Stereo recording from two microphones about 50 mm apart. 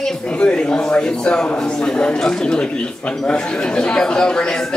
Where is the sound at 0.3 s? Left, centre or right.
Left.